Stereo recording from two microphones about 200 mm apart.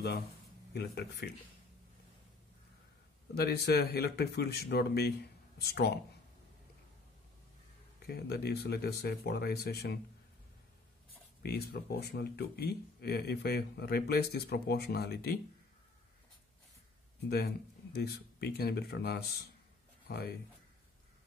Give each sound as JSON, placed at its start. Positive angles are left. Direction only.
{"t": 0.7, "sound": "speech", "side_deg": 55}
{"t": 3.3, "sound": "speech", "side_deg": 55}
{"t": 8.0, "sound": "speech", "side_deg": 55}
{"t": 11.4, "sound": "speech", "side_deg": 55}
{"t": 17.9, "sound": "speech", "side_deg": 50}